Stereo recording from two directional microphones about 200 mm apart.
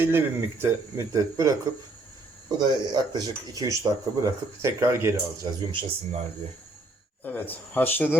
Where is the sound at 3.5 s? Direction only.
15° right (ahead or behind).